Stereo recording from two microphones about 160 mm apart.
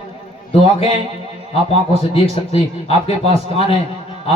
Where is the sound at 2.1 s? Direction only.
35° left (ahead or behind).